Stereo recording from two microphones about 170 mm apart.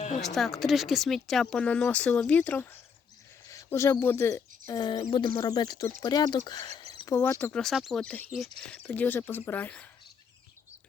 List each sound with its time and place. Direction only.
0.2 s speech: centre (ahead or behind)
3.5 s a sound: 15° left (ahead or behind)
4.0 s speech: 15° left (ahead or behind)
7.2 s speech: 10° left (ahead or behind)